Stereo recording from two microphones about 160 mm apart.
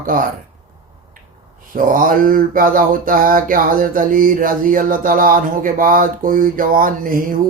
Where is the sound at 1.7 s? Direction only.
60° right (ahead or behind).